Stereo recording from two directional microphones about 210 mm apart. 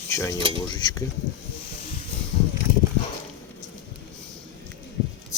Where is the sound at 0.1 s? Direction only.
15° left (ahead or behind).